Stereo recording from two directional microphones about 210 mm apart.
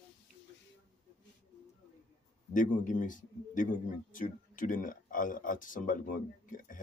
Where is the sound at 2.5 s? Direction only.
40° left (ahead or behind).